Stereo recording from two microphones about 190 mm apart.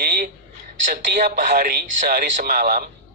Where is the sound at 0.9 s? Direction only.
45° right (ahead or behind).